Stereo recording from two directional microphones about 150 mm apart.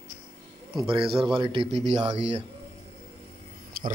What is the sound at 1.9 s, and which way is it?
Speech, 45° right (ahead or behind).